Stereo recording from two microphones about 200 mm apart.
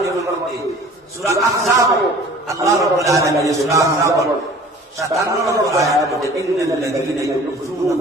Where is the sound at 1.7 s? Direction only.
15° right (ahead or behind).